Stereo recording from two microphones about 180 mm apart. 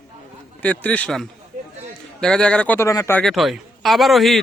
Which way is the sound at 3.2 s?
Centre (ahead or behind).